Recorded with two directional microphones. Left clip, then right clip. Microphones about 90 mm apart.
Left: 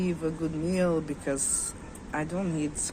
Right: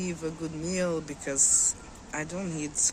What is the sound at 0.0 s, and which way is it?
Speech, 35° right (ahead or behind).